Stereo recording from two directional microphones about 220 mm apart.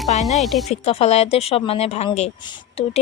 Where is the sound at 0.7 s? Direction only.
30° left (ahead or behind).